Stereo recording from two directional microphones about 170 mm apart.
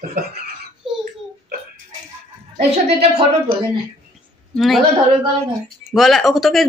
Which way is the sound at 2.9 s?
35° right (ahead or behind).